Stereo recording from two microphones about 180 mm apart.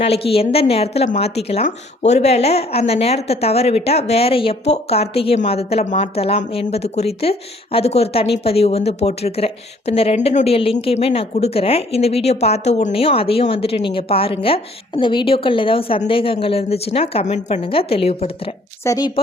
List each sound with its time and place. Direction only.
0.0 s a woman's voice: 35° left (ahead or behind)
18.9 s speech: 25° left (ahead or behind)